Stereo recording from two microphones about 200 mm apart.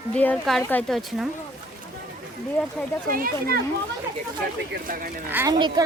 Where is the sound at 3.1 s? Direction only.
45° right (ahead or behind).